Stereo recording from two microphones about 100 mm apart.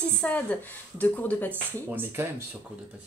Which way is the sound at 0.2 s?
15° left (ahead or behind).